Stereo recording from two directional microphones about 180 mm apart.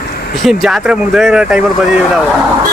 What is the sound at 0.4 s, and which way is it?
Speech, centre (ahead or behind).